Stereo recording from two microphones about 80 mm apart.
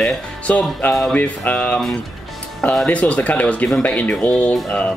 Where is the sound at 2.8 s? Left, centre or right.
Centre.